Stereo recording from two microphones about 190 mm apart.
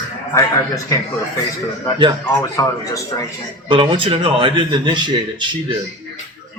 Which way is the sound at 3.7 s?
25° right (ahead or behind).